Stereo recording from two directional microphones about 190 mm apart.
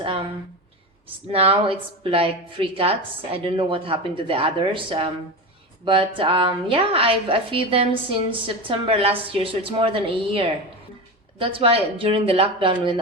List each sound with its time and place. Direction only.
1.3 s a woman's voice: 30° right (ahead or behind)